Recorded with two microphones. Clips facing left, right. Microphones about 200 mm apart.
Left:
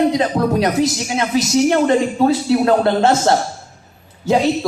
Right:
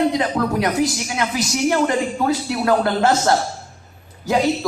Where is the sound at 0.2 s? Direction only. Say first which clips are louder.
Left 4 dB; 25° left (ahead or behind).